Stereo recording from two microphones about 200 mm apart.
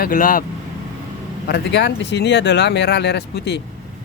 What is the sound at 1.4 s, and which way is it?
Speech, 55° left (ahead or behind).